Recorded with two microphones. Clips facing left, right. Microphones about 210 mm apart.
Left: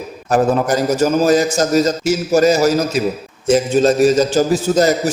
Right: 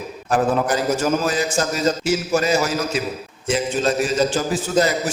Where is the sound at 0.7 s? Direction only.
40° left (ahead or behind).